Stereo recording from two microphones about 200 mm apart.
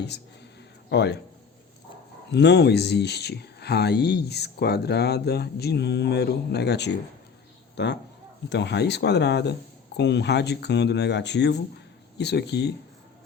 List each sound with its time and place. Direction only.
0.9 s speech: 55° left (ahead or behind)
2.3 s speech: 60° left (ahead or behind)